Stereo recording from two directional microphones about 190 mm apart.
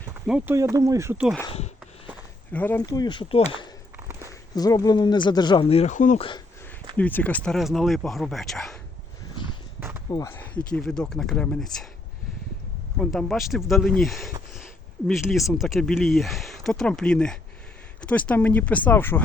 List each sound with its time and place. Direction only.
0.1 s speech: 10° right (ahead or behind)
1.5 s a sound: 35° left (ahead or behind)
2.5 s speech: 10° left (ahead or behind)
2.8 s speech: 20° left (ahead or behind)
4.3 s speech: 20° left (ahead or behind); by 6.2 s 40° left (ahead or behind)
6.9 s speech: 10° left (ahead or behind)
9.3 s a sound: 25° left (ahead or behind)
10.1 s speech: 15° left (ahead or behind)
13.0 s speech: 5° left (ahead or behind)